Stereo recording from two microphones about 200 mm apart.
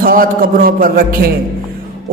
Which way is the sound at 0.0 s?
45° right (ahead or behind).